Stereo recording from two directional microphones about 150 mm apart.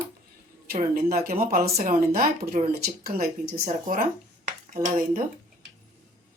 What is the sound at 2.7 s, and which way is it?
Speech, 90° right.